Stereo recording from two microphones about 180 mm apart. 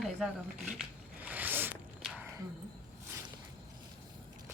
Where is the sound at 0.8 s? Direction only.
10° right (ahead or behind).